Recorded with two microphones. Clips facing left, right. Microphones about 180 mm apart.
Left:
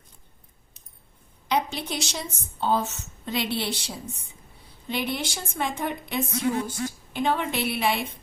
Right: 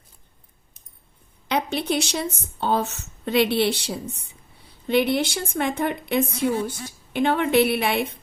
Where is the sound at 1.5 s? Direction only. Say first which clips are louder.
Right 3 dB; 60° right (ahead or behind).